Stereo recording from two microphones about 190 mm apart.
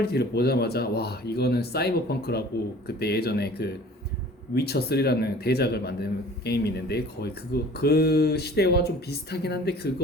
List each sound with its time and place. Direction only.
0.0 s a man's voice: 60° left (ahead or behind)